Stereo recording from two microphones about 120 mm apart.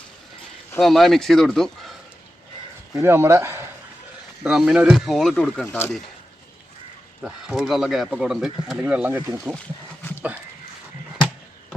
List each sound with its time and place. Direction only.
0.8 s speech: centre (ahead or behind)
2.9 s speech: 20° right (ahead or behind)
4.4 s speech: 5° right (ahead or behind); by 5.9 s 15° left (ahead or behind)
7.2 s speech: 5° right (ahead or behind)
10.0 s a sound: 20° left (ahead or behind)